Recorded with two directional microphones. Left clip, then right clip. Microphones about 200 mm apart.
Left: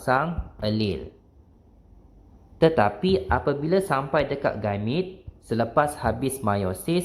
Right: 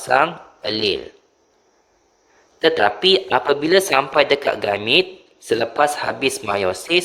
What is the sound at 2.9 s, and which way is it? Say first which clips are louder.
Speech: right 8 dB; 35° right (ahead or behind).